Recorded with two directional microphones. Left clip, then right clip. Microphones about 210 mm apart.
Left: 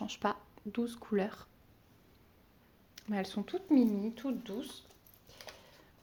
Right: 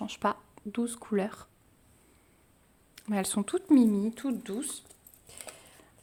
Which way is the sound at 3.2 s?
40° right (ahead or behind).